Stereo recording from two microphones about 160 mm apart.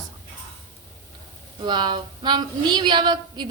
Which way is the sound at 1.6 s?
30° right (ahead or behind).